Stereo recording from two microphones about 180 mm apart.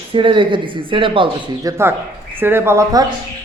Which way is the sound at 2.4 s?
10° right (ahead or behind).